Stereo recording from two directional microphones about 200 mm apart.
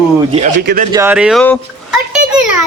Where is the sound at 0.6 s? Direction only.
55° right (ahead or behind).